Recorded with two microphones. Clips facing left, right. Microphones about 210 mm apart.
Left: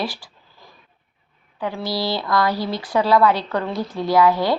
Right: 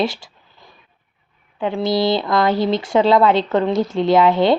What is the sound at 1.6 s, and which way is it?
Speech, 20° right (ahead or behind).